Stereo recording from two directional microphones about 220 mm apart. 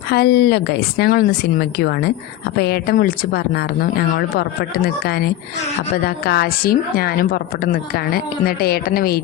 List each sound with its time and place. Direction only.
0.1 s a woman's voice: 45° left (ahead or behind)